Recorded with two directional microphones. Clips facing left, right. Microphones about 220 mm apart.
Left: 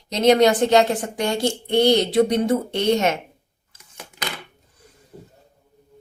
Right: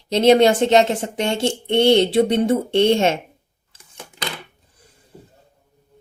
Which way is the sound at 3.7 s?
30° right (ahead or behind).